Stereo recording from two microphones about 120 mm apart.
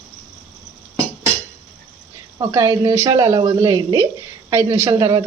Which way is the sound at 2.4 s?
30° right (ahead or behind).